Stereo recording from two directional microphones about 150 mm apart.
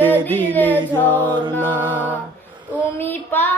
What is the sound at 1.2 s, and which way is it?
Music, 30° right (ahead or behind).